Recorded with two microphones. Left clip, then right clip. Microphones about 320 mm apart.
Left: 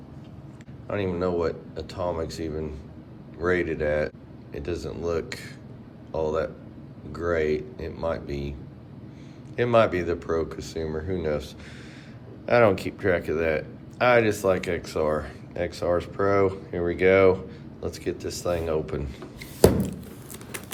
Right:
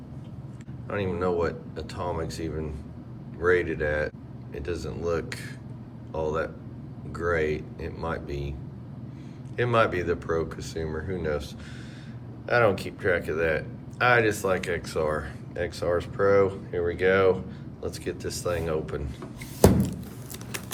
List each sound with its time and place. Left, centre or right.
0.9 s speech: centre
9.6 s speech: centre
12.5 s speech: centre
19.6 s a sound: centre